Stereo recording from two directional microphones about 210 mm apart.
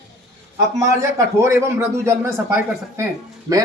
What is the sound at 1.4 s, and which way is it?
Speech, 15° right (ahead or behind).